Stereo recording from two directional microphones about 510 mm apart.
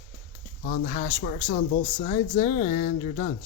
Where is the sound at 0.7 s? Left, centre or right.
Centre.